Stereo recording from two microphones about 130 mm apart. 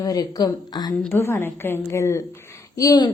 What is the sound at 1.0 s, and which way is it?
A woman's voice, 15° left (ahead or behind).